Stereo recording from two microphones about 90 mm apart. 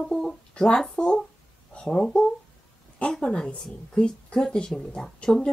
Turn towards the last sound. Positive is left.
turn(degrees=5)  # may be behind; listen again after turning